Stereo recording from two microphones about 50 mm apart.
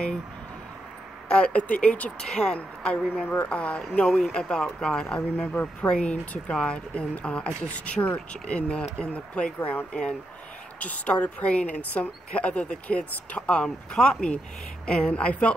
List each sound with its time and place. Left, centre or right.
1.3 s speech: left
2.1 s speech: centre
5.5 s speech: left
9.6 s speech: left